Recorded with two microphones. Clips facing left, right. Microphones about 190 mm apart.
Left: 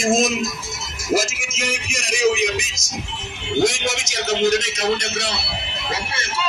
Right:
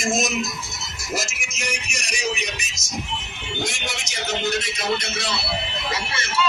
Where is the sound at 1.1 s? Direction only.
90° left.